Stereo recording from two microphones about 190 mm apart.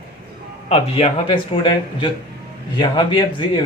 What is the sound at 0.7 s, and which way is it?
Speech, 30° left (ahead or behind).